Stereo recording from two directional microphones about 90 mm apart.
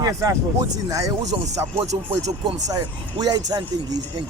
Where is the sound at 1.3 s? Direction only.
75° right (ahead or behind).